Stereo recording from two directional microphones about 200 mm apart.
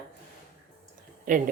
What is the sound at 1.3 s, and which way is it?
Speech, 40° right (ahead or behind).